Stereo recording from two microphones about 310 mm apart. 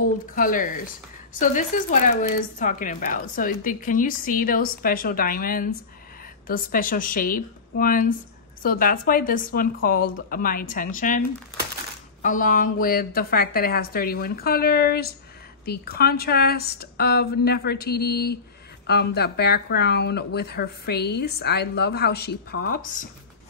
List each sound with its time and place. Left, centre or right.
0.3 s a woman's voice: left